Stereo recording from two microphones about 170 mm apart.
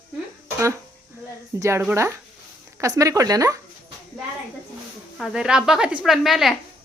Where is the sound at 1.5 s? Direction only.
15° right (ahead or behind).